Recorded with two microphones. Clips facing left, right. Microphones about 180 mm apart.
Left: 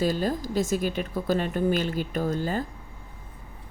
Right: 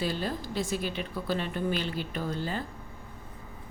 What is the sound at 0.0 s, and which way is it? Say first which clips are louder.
A woman's voice: left 6 dB; 45° left (ahead or behind).